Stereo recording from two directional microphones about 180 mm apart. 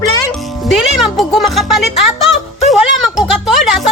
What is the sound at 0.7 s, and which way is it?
Speech, centre (ahead or behind).